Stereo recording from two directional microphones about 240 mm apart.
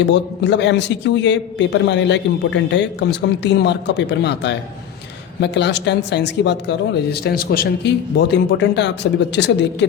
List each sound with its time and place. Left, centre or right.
0.0 s a man's voice: left